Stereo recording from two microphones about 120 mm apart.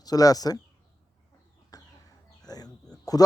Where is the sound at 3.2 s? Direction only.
30° left (ahead or behind).